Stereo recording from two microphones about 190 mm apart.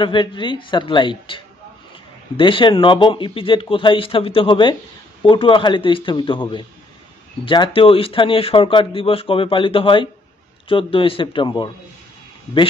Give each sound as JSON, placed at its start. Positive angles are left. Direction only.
{"t": 0.0, "sound": "speech", "side_deg": 25}